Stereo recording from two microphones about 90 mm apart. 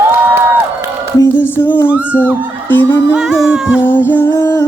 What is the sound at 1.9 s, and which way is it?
Speech, 15° right (ahead or behind).